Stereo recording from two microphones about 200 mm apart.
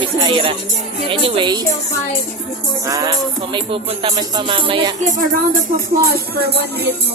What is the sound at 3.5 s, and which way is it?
Speech, 25° right (ahead or behind).